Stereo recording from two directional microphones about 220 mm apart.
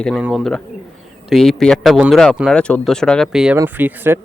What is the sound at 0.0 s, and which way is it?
A man's voice, centre (ahead or behind).